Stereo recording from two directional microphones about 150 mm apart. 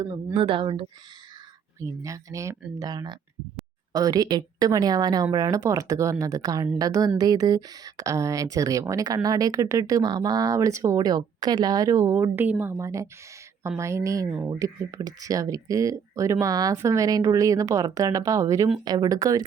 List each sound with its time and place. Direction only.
0.3 s speech: 35° right (ahead or behind)
1.8 s speech: 20° right (ahead or behind)
14.3 s speech: 5° right (ahead or behind)
14.5 s speech: 25° right (ahead or behind)